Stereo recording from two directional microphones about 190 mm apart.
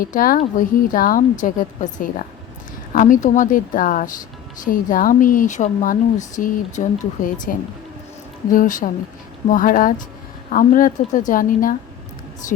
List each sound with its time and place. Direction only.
0.0 s speech: 45° left (ahead or behind)
8.5 s speech: 45° left (ahead or behind)